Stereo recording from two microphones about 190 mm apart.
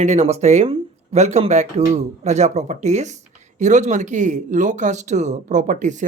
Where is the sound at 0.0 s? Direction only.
35° right (ahead or behind).